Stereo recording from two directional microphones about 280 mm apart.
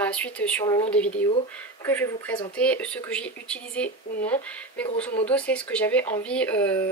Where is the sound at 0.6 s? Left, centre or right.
Centre.